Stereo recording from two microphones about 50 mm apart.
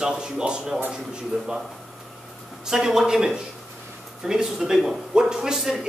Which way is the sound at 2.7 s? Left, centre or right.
Centre.